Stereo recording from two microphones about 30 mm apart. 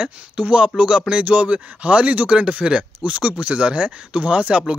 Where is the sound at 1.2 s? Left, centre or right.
Right.